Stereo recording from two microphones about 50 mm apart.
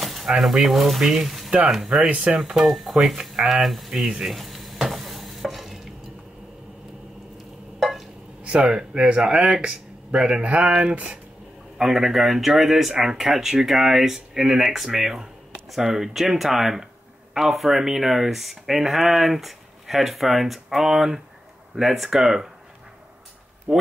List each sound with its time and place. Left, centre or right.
0.0 s a sound: centre
0.4 s speech: centre
2.0 s speech: right
2.3 s speech: centre
4.2 s stir: centre
8.5 s speech: centre
11.8 s speech: centre
23.7 s speech: centre